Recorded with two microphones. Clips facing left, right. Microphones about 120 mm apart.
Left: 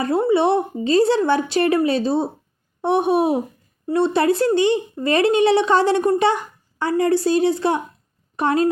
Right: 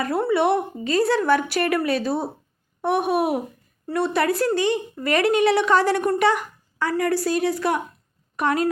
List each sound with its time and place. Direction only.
0.0 s speech: 25° left (ahead or behind)